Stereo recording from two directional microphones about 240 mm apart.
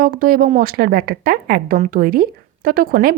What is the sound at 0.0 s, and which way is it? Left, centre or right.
Speech, right.